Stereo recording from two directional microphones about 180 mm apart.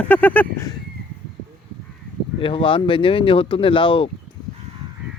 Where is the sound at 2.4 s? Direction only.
30° left (ahead or behind).